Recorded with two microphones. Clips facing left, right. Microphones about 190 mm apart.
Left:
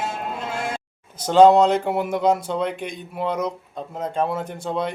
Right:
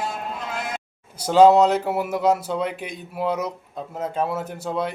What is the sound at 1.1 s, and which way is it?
Speech, 10° right (ahead or behind).